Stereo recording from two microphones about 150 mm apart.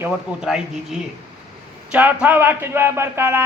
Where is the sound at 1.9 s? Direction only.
10° right (ahead or behind).